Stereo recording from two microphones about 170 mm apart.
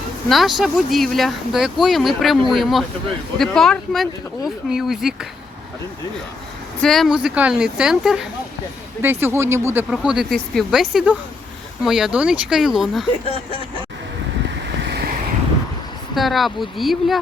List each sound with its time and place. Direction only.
0.3 s speech: centre (ahead or behind)
6.8 s speech: centre (ahead or behind); by 9.8 s 15° right (ahead or behind)
9.9 s speech: 5° right (ahead or behind)
14.8 s vehicle: 70° right (ahead or behind)
16.1 s speech: centre (ahead or behind)